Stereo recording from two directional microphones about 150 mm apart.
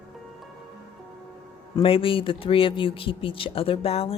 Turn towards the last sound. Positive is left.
turn(degrees=40)  # may be behind; listen again after turning